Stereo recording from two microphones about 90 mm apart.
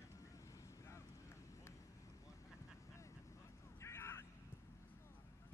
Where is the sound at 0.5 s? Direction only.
35° left (ahead or behind).